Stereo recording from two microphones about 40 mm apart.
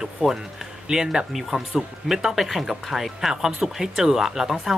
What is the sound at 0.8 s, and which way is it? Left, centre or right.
Speech, centre.